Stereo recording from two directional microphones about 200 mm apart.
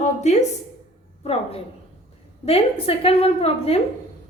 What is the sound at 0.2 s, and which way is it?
A woman's voice, 35° left (ahead or behind).